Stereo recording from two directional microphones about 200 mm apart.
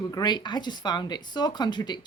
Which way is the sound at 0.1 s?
20° left (ahead or behind).